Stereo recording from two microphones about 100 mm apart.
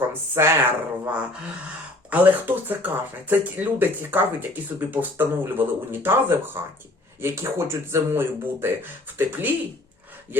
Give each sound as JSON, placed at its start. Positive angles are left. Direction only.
{"t": 0.1, "sound": "speech", "side_deg": -25}